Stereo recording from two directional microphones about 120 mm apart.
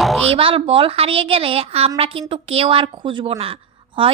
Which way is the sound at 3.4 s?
55° right (ahead or behind).